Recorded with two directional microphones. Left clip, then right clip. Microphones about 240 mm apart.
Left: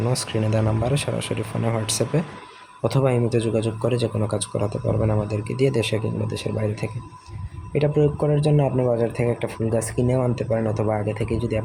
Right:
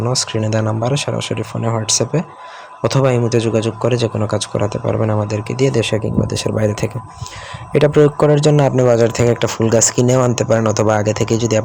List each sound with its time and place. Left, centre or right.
0.0 s speech: centre